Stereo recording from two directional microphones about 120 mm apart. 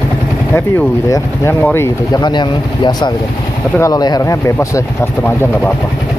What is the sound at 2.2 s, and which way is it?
Speech, 40° left (ahead or behind).